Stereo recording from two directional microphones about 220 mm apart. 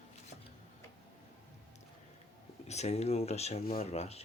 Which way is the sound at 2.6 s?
30° left (ahead or behind).